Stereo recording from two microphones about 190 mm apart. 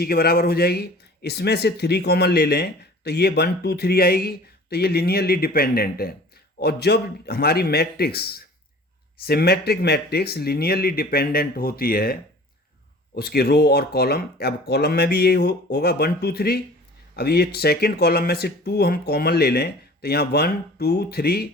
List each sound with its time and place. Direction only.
0.0 s speech: 55° left (ahead or behind)
13.1 s speech: 55° left (ahead or behind)